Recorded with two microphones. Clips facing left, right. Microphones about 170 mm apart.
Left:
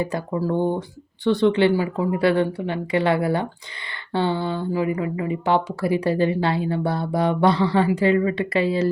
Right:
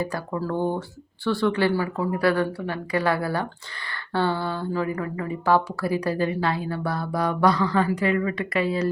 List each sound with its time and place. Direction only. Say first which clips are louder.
0.3 s speech: left 3 dB; 15° left (ahead or behind)